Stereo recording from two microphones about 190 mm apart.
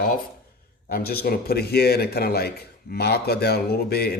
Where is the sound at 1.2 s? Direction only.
55° left (ahead or behind).